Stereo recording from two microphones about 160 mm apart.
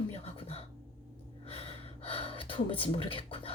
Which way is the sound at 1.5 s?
35° left (ahead or behind).